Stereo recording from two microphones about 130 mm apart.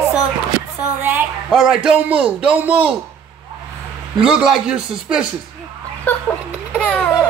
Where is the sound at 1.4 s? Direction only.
Centre (ahead or behind).